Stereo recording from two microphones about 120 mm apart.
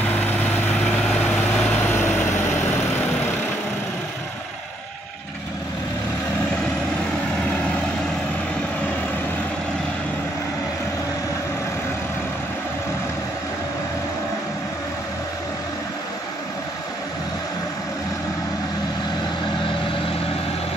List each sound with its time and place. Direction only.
1.6 s vehicle: 20° left (ahead or behind)